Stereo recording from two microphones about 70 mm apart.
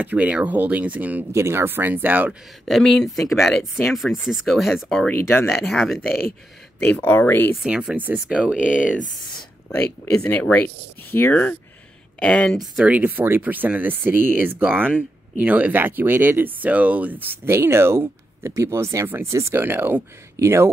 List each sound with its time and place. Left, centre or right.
0.0 s speech: right
1.3 s speech: right
2.6 s speech: centre
5.1 s speech: left
5.5 s speech: centre
6.8 s speech: left
7.6 s speech: centre
10.1 s speech: centre
12.2 s speech: centre
12.4 s speech: centre
12.8 s speech: right